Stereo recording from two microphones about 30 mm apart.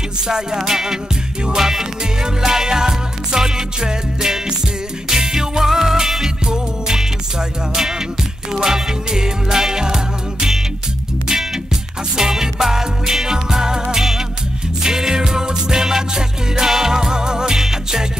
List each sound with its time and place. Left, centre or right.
0.3 s music: right
6.4 s music: right
12.2 s music: centre
17.6 s music: centre